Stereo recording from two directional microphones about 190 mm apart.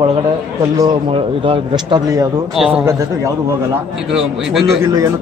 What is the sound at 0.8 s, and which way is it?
Speech, 25° right (ahead or behind).